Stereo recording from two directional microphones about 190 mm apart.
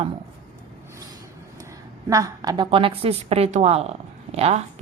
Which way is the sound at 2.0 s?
15° right (ahead or behind).